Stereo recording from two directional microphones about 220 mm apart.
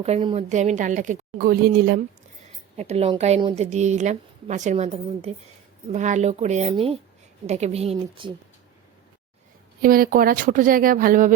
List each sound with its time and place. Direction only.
0.0 s a woman's voice: 25° right (ahead or behind); by 2.0 s 40° right (ahead or behind)
2.7 s a woman's voice: 30° right (ahead or behind)
9.8 s a woman's voice: 40° right (ahead or behind)